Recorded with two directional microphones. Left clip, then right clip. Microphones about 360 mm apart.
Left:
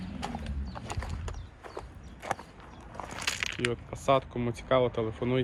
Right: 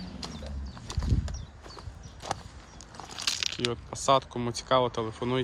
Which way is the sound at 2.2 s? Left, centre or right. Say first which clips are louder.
Left 1 dB; centre.